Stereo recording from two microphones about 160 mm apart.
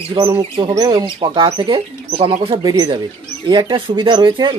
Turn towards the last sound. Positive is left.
turn(degrees=-30)  # may be behind; listen again after turning